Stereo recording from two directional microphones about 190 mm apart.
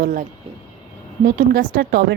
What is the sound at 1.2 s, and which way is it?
Speech, 45° right (ahead or behind).